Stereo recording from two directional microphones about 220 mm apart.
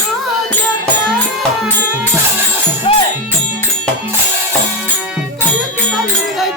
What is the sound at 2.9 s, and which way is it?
Music, 25° left (ahead or behind).